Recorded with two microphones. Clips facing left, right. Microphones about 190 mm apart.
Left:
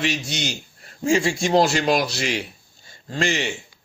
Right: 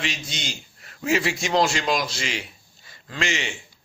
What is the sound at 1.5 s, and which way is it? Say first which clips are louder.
Speech: left 4 dB; 35° left (ahead or behind).